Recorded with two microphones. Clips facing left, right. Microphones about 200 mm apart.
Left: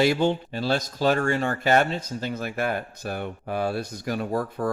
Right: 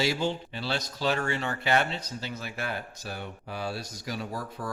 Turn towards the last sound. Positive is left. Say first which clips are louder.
# left 9 dB
turn(degrees=55)  # may be behind; listen again after turning